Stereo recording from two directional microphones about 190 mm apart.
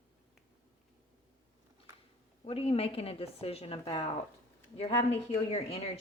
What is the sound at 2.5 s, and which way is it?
A woman's voice, 30° left (ahead or behind).